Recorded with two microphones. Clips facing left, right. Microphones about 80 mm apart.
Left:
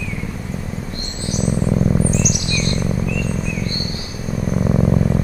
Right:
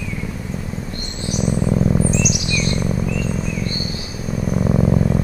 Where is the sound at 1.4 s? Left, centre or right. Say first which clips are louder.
Even; centre.